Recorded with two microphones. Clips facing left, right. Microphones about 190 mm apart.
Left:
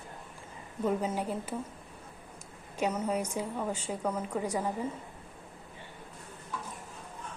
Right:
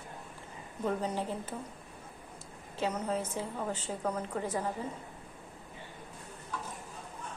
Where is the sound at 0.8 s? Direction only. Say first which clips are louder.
Left 2 dB; 10° left (ahead or behind).